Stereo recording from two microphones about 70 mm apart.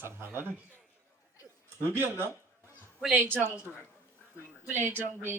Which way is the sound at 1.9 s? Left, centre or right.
Right.